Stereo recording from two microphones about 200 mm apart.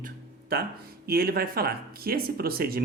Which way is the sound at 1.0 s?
50° right (ahead or behind).